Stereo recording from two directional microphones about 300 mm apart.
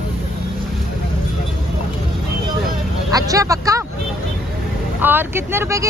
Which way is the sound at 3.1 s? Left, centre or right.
Centre.